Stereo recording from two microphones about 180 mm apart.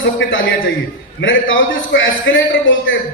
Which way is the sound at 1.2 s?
90° left.